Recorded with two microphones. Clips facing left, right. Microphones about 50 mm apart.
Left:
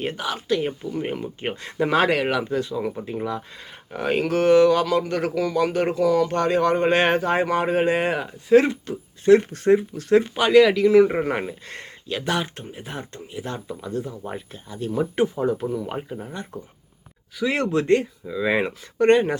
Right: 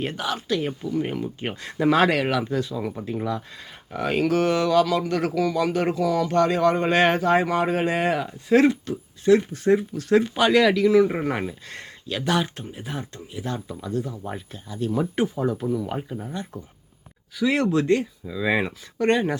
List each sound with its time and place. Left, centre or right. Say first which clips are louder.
0.2 s speech: left 2 dB; centre; by 13.6 s left
14.1 s speech: left 1 dB; centre
14.5 s speech: right 1 dB; left
18.3 s speech: left 2 dB; centre
18.9 s speech: left 5 dB; left